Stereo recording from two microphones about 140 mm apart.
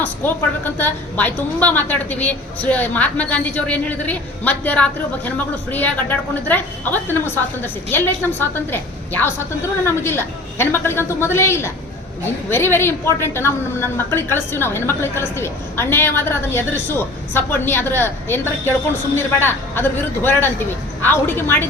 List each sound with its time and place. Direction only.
0.0 s a woman's voice: 15° left (ahead or behind)